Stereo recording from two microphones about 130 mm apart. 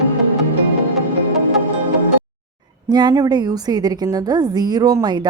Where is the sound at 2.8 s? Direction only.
30° right (ahead or behind).